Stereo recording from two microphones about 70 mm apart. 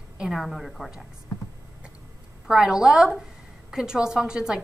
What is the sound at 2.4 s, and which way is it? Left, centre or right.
A woman's voice, centre.